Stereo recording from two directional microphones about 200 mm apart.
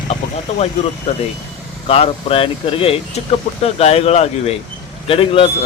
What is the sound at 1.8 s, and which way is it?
Speech, 30° left (ahead or behind).